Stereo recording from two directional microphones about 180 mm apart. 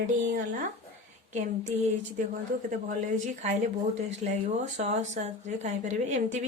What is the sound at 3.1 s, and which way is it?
A woman's voice, 45° right (ahead or behind).